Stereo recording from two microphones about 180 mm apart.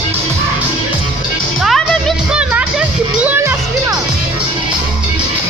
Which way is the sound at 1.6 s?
Centre (ahead or behind).